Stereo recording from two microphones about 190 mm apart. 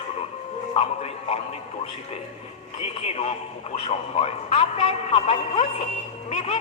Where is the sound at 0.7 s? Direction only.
35° left (ahead or behind).